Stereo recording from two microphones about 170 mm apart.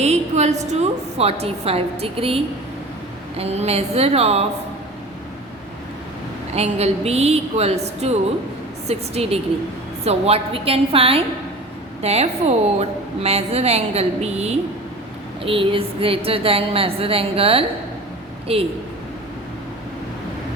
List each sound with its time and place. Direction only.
0.0 s a woman's voice: 40° right (ahead or behind)
6.5 s a woman's voice: 40° right (ahead or behind)